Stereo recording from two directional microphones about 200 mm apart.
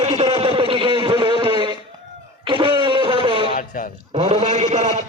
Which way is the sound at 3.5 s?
45° left (ahead or behind).